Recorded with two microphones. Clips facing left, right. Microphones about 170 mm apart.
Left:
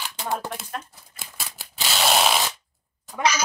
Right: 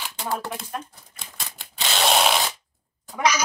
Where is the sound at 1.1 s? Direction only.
5° left (ahead or behind).